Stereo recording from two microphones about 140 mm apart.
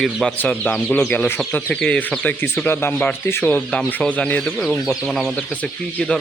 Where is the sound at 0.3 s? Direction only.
10° left (ahead or behind).